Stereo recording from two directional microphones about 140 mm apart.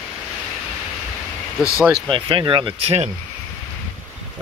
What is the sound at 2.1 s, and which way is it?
Speech, 35° right (ahead or behind).